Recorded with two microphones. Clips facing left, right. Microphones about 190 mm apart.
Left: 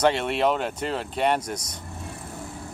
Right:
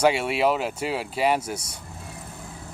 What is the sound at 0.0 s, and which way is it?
Speech, 10° right (ahead or behind).